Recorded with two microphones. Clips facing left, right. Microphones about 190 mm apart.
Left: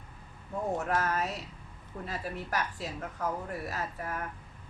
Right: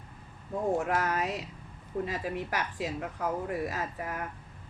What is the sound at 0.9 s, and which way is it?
A woman's voice, 15° right (ahead or behind).